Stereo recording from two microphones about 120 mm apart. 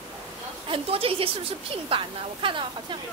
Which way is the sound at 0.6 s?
50° right (ahead or behind).